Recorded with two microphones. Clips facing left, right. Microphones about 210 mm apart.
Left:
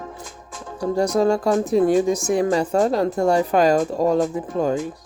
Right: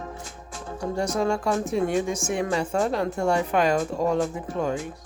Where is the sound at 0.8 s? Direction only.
35° left (ahead or behind).